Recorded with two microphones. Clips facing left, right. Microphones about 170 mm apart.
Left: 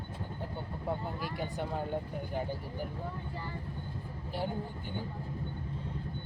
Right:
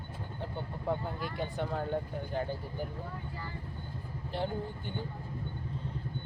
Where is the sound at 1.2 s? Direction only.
10° left (ahead or behind).